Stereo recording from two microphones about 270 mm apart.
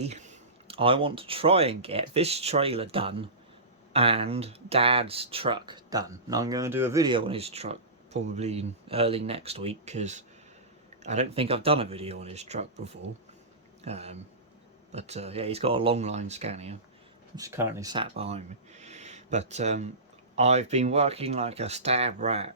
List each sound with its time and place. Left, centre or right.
0.0 s speech: right
17.3 s speech: centre